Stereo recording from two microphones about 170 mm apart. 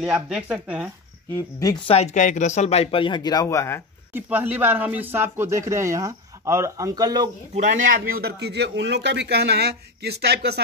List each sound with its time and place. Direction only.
0.1 s speech: 5° right (ahead or behind)
1.3 s speech: 20° left (ahead or behind)
1.9 s speech: 40° left (ahead or behind); by 3.8 s 15° left (ahead or behind)
4.1 s speech: 10° right (ahead or behind)
7.5 s a man's voice: 45° right (ahead or behind); by 10.6 s 75° right (ahead or behind)